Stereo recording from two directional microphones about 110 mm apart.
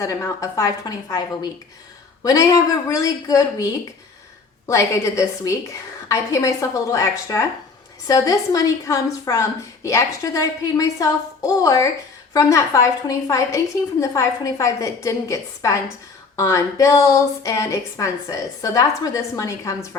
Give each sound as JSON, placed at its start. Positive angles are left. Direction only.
{"t": 0.0, "sound": "a woman's voice", "side_deg": 30}